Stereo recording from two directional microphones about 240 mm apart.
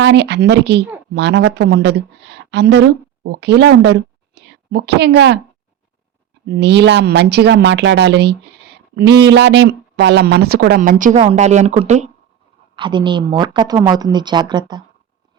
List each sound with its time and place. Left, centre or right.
0.0 s speech: right
6.6 s a woman's voice: right; by 14.8 s centre